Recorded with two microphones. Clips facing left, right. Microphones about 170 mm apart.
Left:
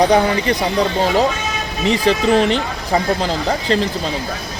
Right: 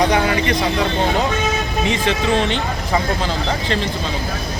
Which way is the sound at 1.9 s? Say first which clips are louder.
Left 6 dB; 35° left (ahead or behind).